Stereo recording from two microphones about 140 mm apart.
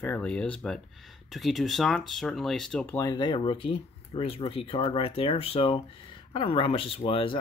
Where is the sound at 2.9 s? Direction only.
25° left (ahead or behind).